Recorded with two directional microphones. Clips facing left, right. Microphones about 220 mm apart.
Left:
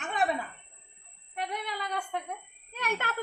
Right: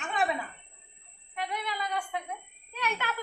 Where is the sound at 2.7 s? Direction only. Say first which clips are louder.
Left 1 dB; 50° left (ahead or behind).